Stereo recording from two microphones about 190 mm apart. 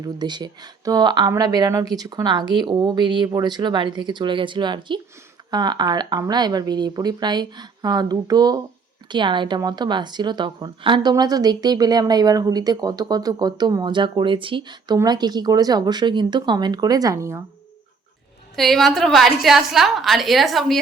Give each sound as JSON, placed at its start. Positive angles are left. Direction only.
{"t": 0.0, "sound": "a woman's voice", "side_deg": -20}
{"t": 18.5, "sound": "a woman's voice", "side_deg": 0}